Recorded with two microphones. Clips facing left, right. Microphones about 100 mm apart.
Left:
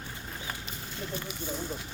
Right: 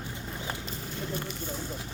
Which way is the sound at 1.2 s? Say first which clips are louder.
Even; 5° left (ahead or behind).